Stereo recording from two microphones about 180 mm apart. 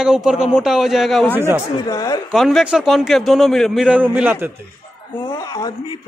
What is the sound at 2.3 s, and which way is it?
A man's voice, centre (ahead or behind).